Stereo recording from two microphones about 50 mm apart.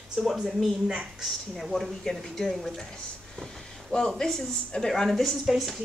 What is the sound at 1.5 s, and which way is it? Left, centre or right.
Speech, centre.